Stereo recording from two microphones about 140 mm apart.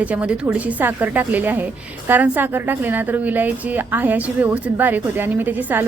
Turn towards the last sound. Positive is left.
turn(degrees=-10)  # may be behind; listen again after turning